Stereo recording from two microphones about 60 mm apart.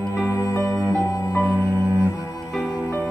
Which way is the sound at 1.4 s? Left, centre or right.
Right.